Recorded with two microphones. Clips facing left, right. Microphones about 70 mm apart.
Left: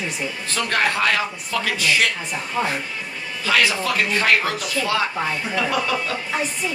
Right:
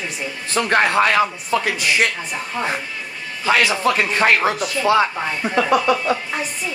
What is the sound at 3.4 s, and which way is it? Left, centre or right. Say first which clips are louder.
Speech: right 3 dB; right.